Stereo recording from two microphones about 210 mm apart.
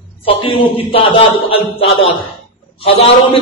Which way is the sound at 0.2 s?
25° left (ahead or behind).